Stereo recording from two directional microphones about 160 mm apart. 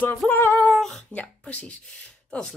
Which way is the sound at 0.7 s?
5° left (ahead or behind).